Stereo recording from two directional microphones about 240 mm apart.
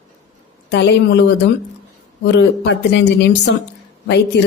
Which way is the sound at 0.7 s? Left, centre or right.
Left.